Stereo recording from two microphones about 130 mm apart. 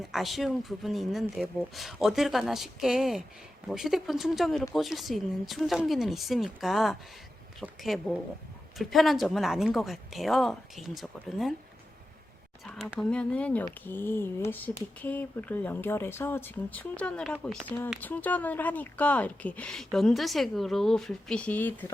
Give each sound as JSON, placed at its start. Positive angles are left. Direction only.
{"t": 0.0, "sound": "speech", "side_deg": 0}
{"t": 12.6, "sound": "speech", "side_deg": 0}